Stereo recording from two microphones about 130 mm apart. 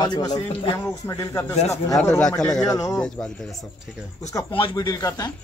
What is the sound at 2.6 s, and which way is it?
Speech, 30° left (ahead or behind).